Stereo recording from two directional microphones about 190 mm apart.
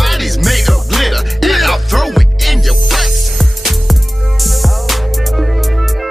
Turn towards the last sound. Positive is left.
turn(degrees=0)  # may be behind; listen again after turning